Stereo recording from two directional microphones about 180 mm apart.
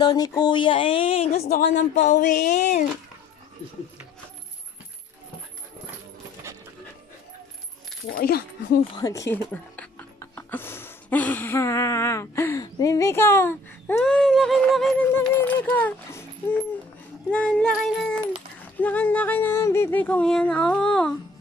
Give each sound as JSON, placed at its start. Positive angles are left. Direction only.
{"t": 0.0, "sound": "speech", "side_deg": 20}
{"t": 8.1, "sound": "speech", "side_deg": 60}
{"t": 8.9, "sound": "speech", "side_deg": 20}
{"t": 14.0, "sound": "a sound", "side_deg": 0}
{"t": 15.1, "sound": "music", "side_deg": 10}
{"t": 17.3, "sound": "a sound", "side_deg": 5}